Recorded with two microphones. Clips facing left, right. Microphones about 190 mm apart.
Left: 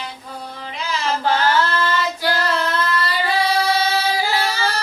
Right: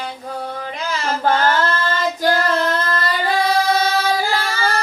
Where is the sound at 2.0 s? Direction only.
45° right (ahead or behind).